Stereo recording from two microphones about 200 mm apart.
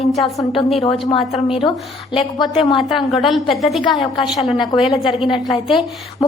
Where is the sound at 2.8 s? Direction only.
Centre (ahead or behind).